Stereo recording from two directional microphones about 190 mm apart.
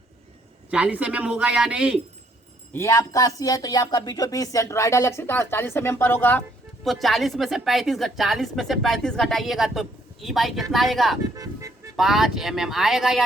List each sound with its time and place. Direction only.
0.7 s a woman's voice: 5° right (ahead or behind)
2.7 s a woman's voice: 15° left (ahead or behind); by 13.2 s centre (ahead or behind)